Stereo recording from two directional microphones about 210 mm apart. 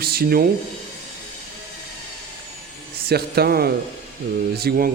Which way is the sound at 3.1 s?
50° right (ahead or behind).